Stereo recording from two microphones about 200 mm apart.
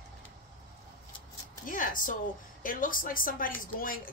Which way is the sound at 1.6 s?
40° left (ahead or behind).